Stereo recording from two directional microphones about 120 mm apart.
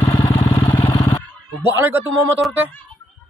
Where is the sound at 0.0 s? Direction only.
25° left (ahead or behind).